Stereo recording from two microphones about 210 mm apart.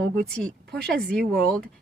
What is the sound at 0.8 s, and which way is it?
Speech, 50° right (ahead or behind).